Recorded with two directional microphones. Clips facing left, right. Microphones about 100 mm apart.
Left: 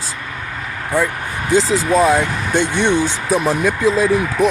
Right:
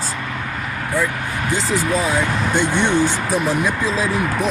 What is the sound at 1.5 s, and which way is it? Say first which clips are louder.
Speech: left 8 dB; 90° left.